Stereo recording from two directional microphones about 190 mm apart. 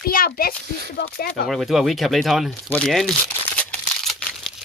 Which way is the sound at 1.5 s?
Centre (ahead or behind).